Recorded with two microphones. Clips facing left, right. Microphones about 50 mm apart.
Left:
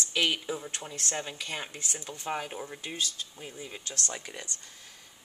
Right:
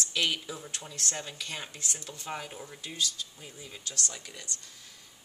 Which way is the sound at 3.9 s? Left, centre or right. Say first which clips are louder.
Left 2 dB; left.